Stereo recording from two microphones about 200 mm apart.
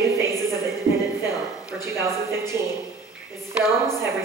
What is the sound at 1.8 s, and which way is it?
Speech, 15° right (ahead or behind).